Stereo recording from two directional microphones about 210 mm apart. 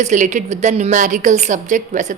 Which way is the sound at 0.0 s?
35° right (ahead or behind).